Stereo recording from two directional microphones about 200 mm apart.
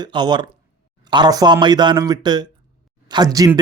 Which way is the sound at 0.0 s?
20° right (ahead or behind).